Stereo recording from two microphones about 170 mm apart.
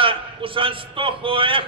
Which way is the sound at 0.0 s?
30° right (ahead or behind).